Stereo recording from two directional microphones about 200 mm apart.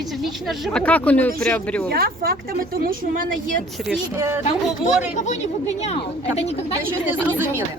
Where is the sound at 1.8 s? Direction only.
50° right (ahead or behind).